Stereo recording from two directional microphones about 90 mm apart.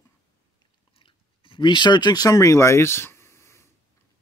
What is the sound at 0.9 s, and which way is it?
Chewing, 75° left (ahead or behind).